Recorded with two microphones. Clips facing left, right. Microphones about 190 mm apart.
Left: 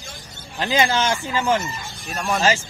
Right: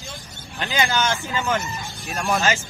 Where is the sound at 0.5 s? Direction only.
30° left (ahead or behind).